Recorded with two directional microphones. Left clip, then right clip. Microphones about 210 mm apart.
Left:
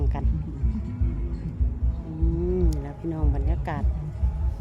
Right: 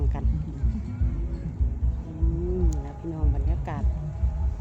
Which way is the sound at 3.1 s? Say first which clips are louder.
Left 3 dB; 25° left (ahead or behind).